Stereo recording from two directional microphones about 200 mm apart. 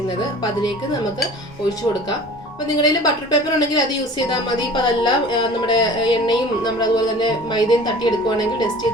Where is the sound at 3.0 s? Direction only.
20° left (ahead or behind).